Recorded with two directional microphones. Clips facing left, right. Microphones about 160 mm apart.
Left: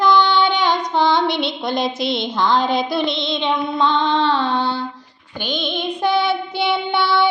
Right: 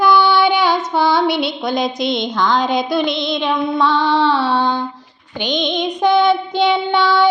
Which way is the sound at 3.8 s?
25° left (ahead or behind).